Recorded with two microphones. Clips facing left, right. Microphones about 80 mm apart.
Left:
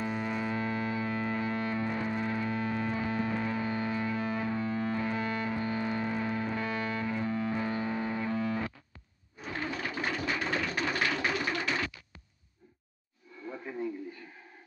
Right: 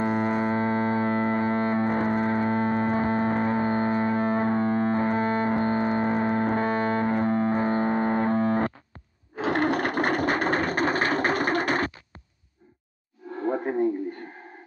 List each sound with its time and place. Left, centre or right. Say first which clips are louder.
0.0 s music: right 9 dB; right
9.3 s a sound: right 13 dB; right
13.3 s radio: right 14 dB; right